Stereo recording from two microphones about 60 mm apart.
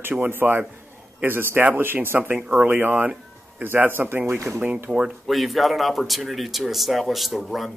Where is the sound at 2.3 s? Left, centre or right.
Right.